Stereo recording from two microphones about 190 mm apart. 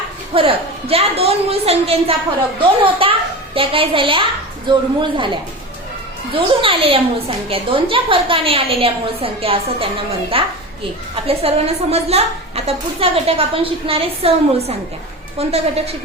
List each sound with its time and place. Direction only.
0.3 s a woman's voice: 30° right (ahead or behind)